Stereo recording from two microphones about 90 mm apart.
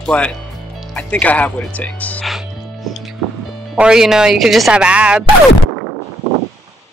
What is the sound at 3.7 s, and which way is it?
Speech, 10° right (ahead or behind).